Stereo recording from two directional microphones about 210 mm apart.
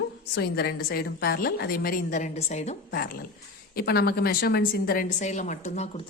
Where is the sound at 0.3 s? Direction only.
50° left (ahead or behind); by 2.7 s 30° left (ahead or behind).